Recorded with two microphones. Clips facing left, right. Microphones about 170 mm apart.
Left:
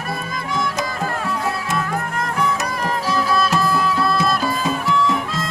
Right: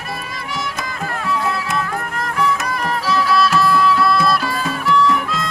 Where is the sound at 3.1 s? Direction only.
45° left (ahead or behind).